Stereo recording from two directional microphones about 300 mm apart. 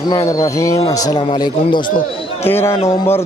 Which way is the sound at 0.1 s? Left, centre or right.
Centre.